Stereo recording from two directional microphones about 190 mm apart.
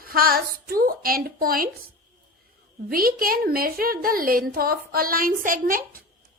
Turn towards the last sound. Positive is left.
turn(degrees=-50)  # may be behind; listen again after turning